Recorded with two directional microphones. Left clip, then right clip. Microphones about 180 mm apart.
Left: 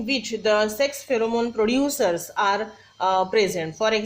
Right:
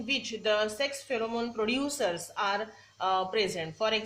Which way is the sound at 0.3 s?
35° left (ahead or behind).